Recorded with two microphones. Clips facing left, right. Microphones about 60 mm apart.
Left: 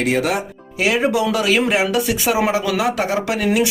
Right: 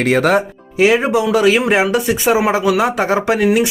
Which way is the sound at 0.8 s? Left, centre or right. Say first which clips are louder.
Right 4 dB; right.